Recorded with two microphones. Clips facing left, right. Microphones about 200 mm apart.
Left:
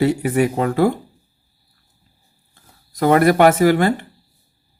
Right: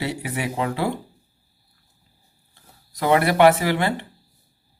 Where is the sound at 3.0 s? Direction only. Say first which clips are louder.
Left 4 dB; 45° left (ahead or behind).